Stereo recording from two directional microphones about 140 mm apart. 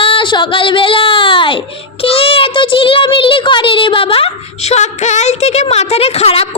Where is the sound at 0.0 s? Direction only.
40° left (ahead or behind).